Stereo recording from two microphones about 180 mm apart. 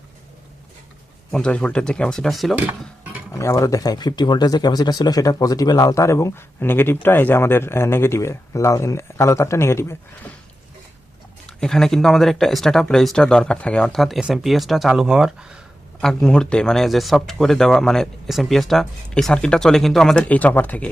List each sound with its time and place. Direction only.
1.3 s speech: 5° left (ahead or behind)
3.3 s speech: 15° left (ahead or behind)
11.4 s speech: 5° left (ahead or behind)